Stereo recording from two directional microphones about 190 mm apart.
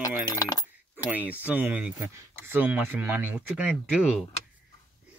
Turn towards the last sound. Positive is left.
turn(degrees=-5)  # may be behind; listen again after turning